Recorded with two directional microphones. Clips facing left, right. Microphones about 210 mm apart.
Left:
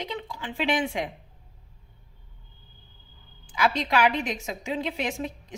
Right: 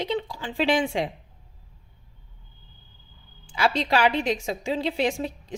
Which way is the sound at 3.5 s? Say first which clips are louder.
Right 2 dB; 30° right (ahead or behind).